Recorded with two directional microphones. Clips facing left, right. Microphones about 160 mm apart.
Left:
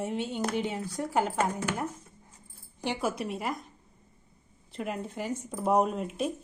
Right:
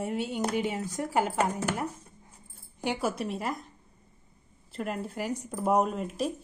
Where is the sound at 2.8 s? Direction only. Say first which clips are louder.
Right 1 dB; centre (ahead or behind).